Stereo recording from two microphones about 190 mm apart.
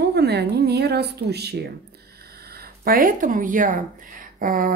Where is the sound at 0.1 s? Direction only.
60° right (ahead or behind).